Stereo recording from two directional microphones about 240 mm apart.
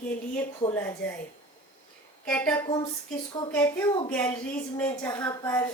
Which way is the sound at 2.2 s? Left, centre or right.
Centre.